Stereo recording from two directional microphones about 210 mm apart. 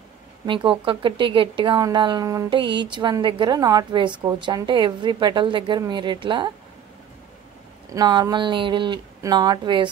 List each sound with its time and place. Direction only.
0.5 s a woman's voice: 25° right (ahead or behind)
7.9 s a woman's voice: 20° right (ahead or behind)